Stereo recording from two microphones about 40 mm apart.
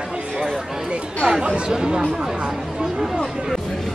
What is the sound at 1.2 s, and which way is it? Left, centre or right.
Chatter, right.